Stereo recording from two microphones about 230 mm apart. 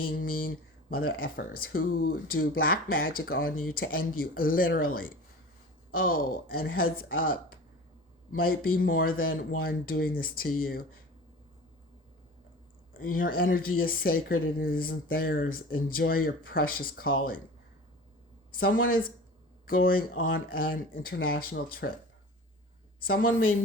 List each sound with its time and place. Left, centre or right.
0.1 s speech: left
5.9 s speech: left
12.9 s speech: left
18.5 s speech: left
20.1 s speech: left
20.5 s speech: left